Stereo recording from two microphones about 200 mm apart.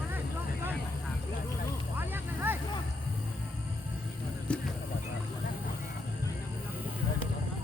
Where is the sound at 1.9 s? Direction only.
10° right (ahead or behind).